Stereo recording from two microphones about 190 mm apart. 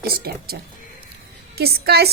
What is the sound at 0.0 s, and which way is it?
A woman's voice, 55° right (ahead or behind).